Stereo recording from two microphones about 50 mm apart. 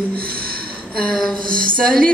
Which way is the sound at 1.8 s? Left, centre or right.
Centre.